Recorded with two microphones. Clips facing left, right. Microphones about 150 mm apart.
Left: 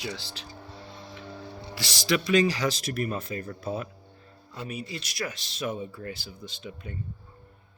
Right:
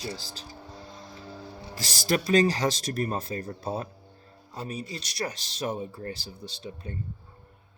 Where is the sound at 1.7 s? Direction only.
45° right (ahead or behind).